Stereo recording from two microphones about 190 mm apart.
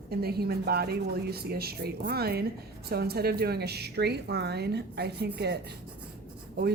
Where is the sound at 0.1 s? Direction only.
55° right (ahead or behind).